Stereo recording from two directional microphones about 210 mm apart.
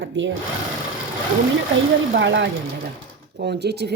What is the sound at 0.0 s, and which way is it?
Speech, 60° right (ahead or behind).